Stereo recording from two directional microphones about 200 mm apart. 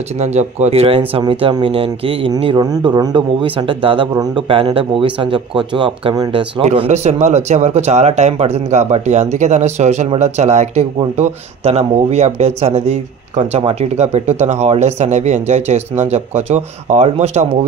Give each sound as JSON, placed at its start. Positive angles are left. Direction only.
{"t": 0.2, "sound": "a man's voice", "side_deg": -35}